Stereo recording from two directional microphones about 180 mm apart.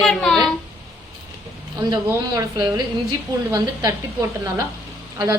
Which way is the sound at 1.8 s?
20° right (ahead or behind).